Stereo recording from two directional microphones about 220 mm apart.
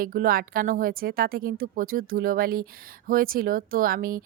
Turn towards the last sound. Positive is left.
turn(degrees=-40)  # may be behind; listen again after turning